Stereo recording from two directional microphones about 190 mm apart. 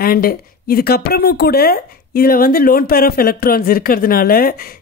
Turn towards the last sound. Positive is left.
turn(degrees=50)  # may be behind; listen again after turning